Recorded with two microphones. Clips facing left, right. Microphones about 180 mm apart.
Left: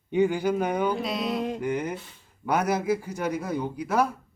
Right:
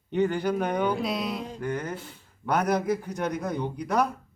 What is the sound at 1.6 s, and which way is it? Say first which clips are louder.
Speech: left 3 dB; 15° left (ahead or behind).